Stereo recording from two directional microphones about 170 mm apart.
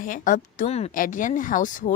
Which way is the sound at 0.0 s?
50° left (ahead or behind).